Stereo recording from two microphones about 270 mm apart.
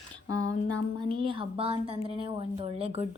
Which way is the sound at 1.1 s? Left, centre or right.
Centre.